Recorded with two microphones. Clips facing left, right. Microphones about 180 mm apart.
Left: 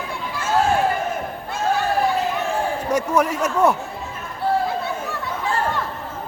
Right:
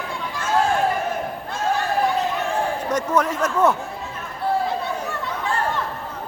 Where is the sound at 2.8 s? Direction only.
10° left (ahead or behind).